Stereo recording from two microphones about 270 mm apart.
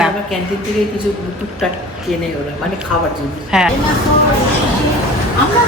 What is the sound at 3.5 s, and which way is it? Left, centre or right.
Speech, centre.